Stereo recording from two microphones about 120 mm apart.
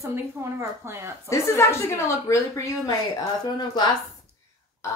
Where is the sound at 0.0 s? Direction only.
25° right (ahead or behind).